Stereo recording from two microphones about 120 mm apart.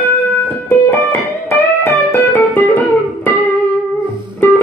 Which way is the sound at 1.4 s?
20° left (ahead or behind).